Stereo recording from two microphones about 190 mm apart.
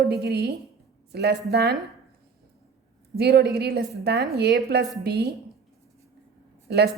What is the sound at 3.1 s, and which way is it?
A woman's voice, 60° right (ahead or behind).